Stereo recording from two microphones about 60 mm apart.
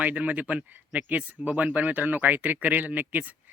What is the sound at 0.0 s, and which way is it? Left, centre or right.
A man's voice, right.